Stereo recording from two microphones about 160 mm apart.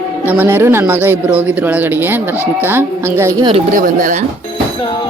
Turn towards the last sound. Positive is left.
turn(degrees=-60)  # may be behind; listen again after turning